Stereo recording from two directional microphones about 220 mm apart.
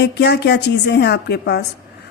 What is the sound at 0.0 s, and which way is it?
A woman's voice, 50° left (ahead or behind).